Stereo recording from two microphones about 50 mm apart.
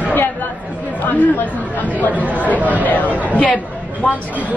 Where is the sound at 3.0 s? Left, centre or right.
Right.